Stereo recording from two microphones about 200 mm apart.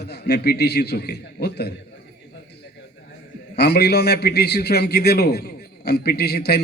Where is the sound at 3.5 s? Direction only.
55° left (ahead or behind).